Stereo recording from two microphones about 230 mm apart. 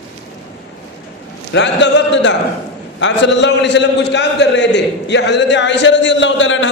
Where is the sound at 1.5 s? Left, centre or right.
Left.